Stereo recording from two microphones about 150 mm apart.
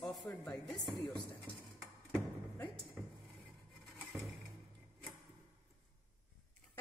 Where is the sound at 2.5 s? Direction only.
10° left (ahead or behind).